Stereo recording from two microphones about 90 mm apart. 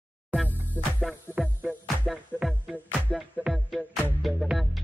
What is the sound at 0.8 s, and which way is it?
Music, 20° left (ahead or behind).